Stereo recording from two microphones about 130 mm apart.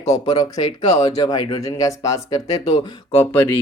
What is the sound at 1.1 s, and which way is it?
Speech, 30° left (ahead or behind).